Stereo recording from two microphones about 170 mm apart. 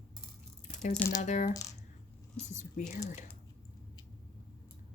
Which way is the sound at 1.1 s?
45° left (ahead or behind).